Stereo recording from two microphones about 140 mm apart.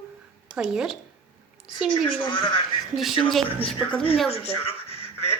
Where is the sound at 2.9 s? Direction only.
Centre (ahead or behind).